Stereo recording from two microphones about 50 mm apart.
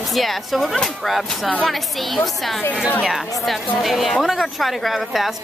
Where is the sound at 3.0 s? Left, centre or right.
Centre.